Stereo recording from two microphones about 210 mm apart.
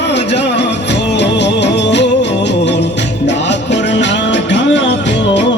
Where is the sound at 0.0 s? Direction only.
55° left (ahead or behind).